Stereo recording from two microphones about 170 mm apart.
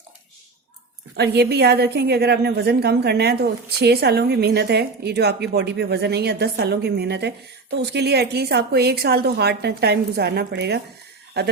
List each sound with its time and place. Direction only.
1.1 s a woman's voice: 75° right (ahead or behind)